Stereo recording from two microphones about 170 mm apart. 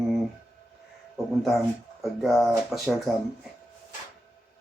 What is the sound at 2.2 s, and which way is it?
Speech, centre (ahead or behind).